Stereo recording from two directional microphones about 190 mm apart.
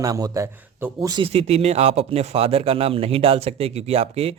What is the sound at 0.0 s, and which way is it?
A man's voice, 15° right (ahead or behind).